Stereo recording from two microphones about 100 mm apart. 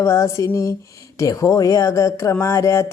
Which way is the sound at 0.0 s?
30° left (ahead or behind).